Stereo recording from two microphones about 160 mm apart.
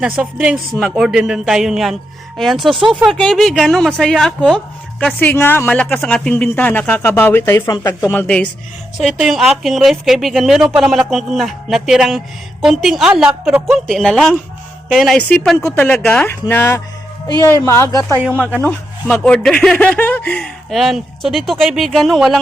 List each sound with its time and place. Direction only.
0.0 s speech: 5° right (ahead or behind); by 8.4 s 10° left (ahead or behind)
9.0 s speech: centre (ahead or behind)